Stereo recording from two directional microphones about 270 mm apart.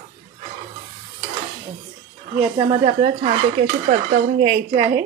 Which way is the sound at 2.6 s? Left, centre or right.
Centre.